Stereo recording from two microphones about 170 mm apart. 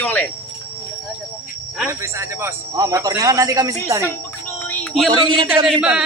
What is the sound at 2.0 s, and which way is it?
Speech, 15° right (ahead or behind).